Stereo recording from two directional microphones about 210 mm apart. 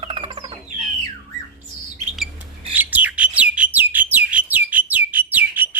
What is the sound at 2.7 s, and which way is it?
Bird, 10° right (ahead or behind).